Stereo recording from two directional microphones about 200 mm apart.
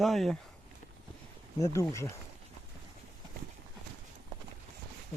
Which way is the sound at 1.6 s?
15° left (ahead or behind).